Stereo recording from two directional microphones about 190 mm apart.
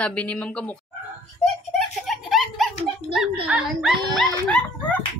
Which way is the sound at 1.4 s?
Centre (ahead or behind).